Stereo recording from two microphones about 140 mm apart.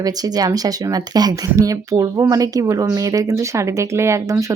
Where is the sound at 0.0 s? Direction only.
25° right (ahead or behind).